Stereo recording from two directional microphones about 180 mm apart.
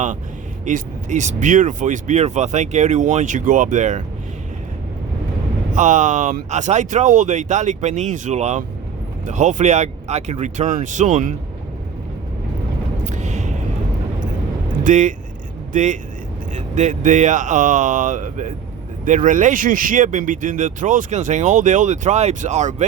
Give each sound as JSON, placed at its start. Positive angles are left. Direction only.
{"t": 0.6, "sound": "speech", "side_deg": -40}
{"t": 5.7, "sound": "speech", "side_deg": -45}
{"t": 13.1, "sound": "a sound", "side_deg": -40}
{"t": 14.8, "sound": "speech", "side_deg": -45}